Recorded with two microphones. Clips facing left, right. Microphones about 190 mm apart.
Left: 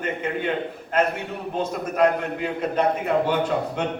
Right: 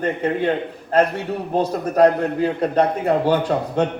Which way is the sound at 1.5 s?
35° right (ahead or behind).